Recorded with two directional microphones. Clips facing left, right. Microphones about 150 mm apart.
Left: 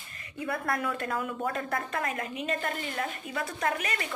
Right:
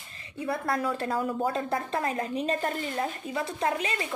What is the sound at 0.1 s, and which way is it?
A woman's voice, 25° right (ahead or behind).